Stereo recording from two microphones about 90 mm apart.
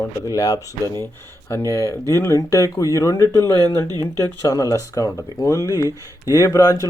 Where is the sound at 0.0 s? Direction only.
35° left (ahead or behind).